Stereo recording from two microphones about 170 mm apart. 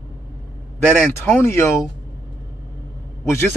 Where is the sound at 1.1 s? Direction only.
15° left (ahead or behind).